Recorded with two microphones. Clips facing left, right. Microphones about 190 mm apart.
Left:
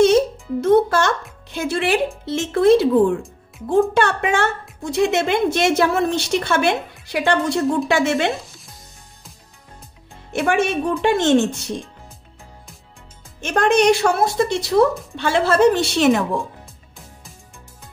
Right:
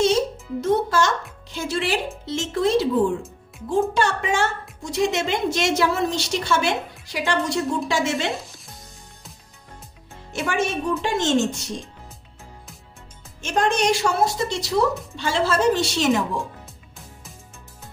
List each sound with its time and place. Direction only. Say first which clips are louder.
0.0 s music: left 6 dB; 55° left (ahead or behind)
3.9 s a woman's voice: left 4 dB; 60° left (ahead or behind)
10.3 s a woman's voice: left 5 dB; 60° left (ahead or behind)
13.4 s a woman's voice: left 5 dB; 60° left (ahead or behind)